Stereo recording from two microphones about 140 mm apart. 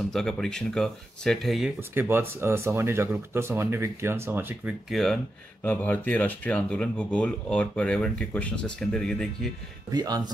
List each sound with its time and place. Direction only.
0.1 s speech: 5° left (ahead or behind)
1.8 s speech: 15° right (ahead or behind)
4.8 s speech: centre (ahead or behind)
9.8 s speech: 25° right (ahead or behind)